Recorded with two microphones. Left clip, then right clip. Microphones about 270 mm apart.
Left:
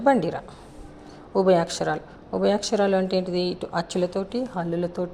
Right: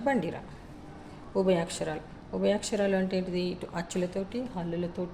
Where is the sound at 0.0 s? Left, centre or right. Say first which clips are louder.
Left 9 dB; left.